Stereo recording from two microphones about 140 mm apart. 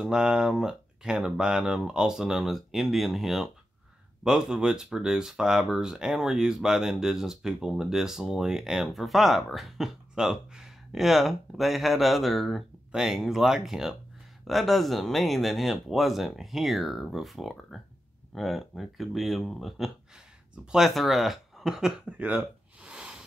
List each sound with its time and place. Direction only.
0.0 s speech: 5° right (ahead or behind)